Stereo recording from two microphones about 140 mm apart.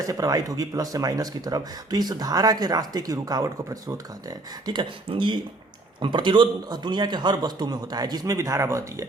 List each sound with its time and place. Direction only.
0.1 s speech: 25° right (ahead or behind)